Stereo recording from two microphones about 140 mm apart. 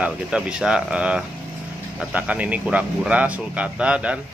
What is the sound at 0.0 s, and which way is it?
Speech, 5° right (ahead or behind).